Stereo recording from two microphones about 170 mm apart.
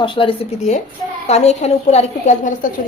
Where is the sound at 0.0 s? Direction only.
30° left (ahead or behind); by 2.6 s 45° left (ahead or behind).